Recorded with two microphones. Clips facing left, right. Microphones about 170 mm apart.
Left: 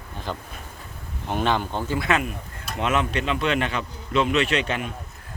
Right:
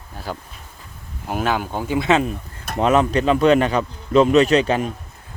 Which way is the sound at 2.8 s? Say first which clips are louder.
Right 7 dB; 35° right (ahead or behind).